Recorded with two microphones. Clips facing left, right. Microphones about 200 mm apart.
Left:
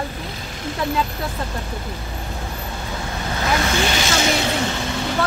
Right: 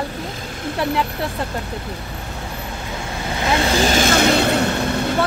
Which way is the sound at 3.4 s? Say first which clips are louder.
Right 3 dB; 30° right (ahead or behind).